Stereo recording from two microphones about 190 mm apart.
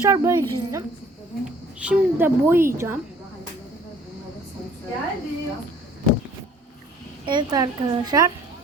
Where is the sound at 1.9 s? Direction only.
10° right (ahead or behind).